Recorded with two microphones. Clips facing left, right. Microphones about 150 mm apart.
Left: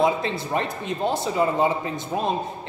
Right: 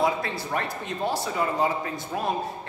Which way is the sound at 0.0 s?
20° left (ahead or behind).